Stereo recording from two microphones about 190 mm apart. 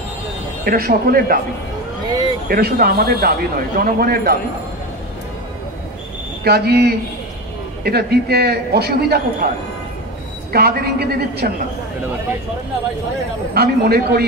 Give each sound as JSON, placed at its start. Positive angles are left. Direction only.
{"t": 0.7, "sound": "speech", "side_deg": -50}
{"t": 2.4, "sound": "speech", "side_deg": -50}
{"t": 6.4, "sound": "a man's voice", "side_deg": -55}
{"t": 10.5, "sound": "a man's voice", "side_deg": -55}
{"t": 13.6, "sound": "a man's voice", "side_deg": -55}